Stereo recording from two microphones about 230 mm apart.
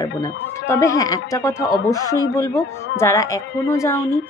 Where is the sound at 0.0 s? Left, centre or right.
Centre.